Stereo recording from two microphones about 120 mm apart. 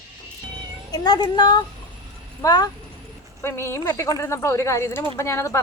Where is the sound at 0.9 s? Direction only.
35° left (ahead or behind).